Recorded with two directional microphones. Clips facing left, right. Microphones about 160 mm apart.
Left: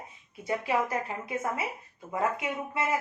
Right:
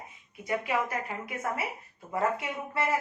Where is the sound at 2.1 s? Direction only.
15° left (ahead or behind).